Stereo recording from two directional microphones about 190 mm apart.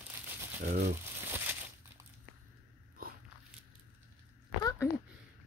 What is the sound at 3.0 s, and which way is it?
Biting, 50° right (ahead or behind).